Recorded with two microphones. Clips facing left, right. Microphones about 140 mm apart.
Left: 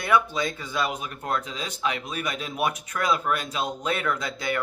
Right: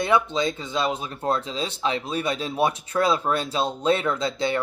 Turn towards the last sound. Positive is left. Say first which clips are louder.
# right 4 dB
turn(degrees=-25)  # may be behind; listen again after turning